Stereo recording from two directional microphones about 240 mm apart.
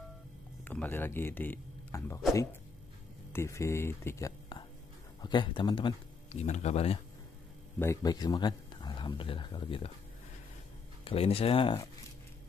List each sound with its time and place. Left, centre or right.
0.7 s speech: centre
3.3 s speech: centre
7.8 s speech: centre
11.1 s speech: left